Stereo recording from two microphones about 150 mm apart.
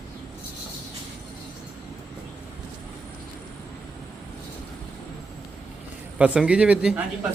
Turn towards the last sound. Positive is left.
turn(degrees=-5)  # may be behind; listen again after turning